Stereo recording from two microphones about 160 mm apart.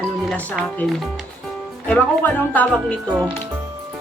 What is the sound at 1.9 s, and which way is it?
Speech, 10° left (ahead or behind).